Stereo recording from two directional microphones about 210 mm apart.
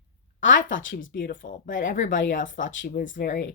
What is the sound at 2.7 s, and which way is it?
Speech, 55° left (ahead or behind).